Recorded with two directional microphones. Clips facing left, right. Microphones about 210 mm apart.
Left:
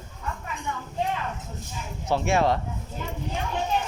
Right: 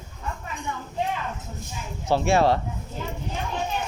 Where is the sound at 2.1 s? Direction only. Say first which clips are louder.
Right 3 dB; 35° right (ahead or behind).